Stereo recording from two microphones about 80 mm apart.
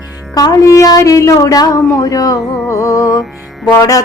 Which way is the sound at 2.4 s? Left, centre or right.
Left.